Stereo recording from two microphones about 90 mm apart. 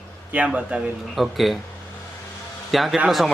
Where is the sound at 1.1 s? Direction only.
Centre (ahead or behind).